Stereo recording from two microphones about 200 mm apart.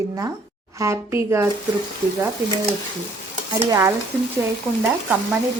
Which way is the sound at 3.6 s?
15° right (ahead or behind).